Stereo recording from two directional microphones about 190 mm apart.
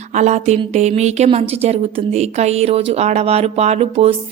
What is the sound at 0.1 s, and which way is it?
A woman's voice, 35° right (ahead or behind).